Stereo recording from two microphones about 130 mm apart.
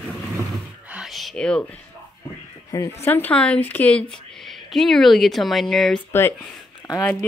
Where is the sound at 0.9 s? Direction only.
5° right (ahead or behind).